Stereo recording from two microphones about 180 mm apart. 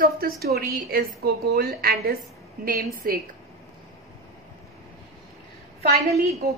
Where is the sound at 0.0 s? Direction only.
60° right (ahead or behind).